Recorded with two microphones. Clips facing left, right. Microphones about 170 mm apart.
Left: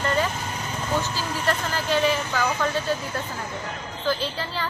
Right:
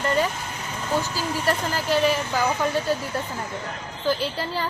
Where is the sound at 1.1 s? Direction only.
10° right (ahead or behind).